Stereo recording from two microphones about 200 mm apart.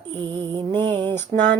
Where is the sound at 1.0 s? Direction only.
10° left (ahead or behind).